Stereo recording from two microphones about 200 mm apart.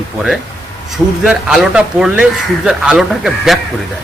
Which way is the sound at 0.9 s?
5° right (ahead or behind).